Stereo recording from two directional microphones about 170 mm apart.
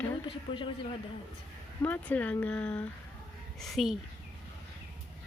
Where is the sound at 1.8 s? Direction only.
10° left (ahead or behind).